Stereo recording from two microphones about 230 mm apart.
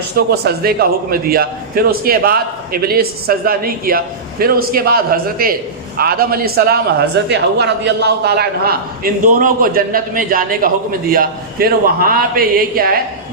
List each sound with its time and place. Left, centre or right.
0.3 s a man's voice: right